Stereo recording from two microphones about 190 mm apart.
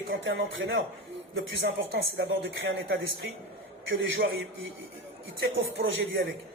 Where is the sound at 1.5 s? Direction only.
65° right (ahead or behind).